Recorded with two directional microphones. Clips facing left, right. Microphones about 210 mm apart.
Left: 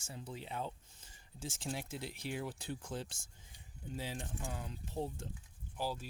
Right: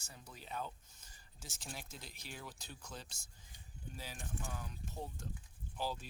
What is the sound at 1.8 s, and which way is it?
Speech, 70° left (ahead or behind).